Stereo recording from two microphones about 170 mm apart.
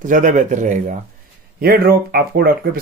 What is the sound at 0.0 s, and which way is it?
Speech, 50° right (ahead or behind).